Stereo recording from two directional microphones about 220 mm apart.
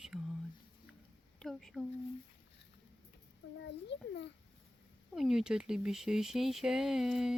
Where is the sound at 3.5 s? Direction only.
55° left (ahead or behind).